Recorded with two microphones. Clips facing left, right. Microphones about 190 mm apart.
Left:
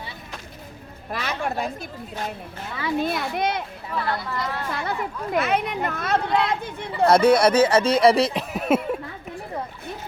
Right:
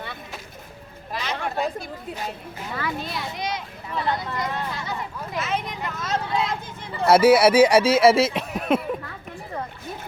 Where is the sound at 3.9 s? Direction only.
20° right (ahead or behind).